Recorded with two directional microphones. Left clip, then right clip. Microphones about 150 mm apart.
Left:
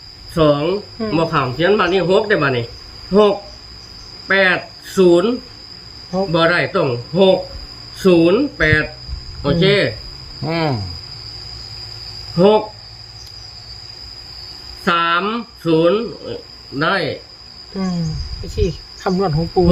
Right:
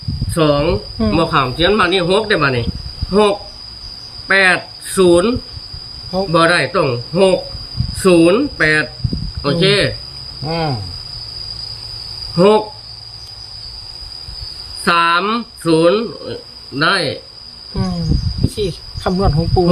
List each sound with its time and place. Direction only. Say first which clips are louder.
0.3 s speech: right 1 dB; 15° right (ahead or behind)
0.9 s speech: right 3 dB; 25° right (ahead or behind)
1.2 s speech: right 2 dB; 15° right (ahead or behind)
4.3 s cricket: right 2 dB; 15° right (ahead or behind)
6.1 s speech: right 2 dB; 20° right (ahead or behind)
10.4 s cricket: even; 75° left (ahead or behind)
12.4 s speech: right 1 dB; 20° right (ahead or behind)
14.8 s speech: right 3 dB; 15° right (ahead or behind)
19.0 s speech: right 1 dB; 10° right (ahead or behind)